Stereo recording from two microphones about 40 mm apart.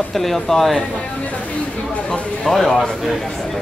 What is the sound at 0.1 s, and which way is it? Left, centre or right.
Speech, centre.